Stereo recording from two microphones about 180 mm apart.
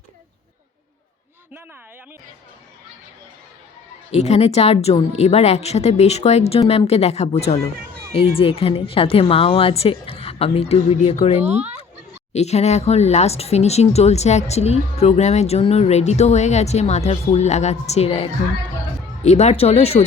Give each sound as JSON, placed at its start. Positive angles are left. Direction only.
{"t": 4.1, "sound": "speech", "side_deg": 35}
{"t": 11.4, "sound": "speech", "side_deg": -35}
{"t": 12.3, "sound": "speech", "side_deg": 35}